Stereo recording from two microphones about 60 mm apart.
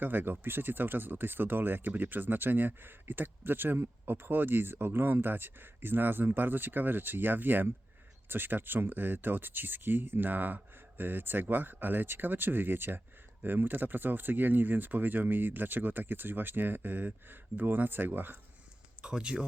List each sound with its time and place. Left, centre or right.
0.0 s speech: right
19.0 s speech: centre